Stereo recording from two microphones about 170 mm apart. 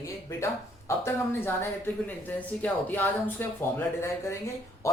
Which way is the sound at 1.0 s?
15° left (ahead or behind).